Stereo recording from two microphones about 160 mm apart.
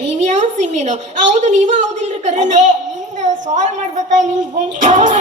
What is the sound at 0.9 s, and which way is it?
A woman's voice, 50° right (ahead or behind).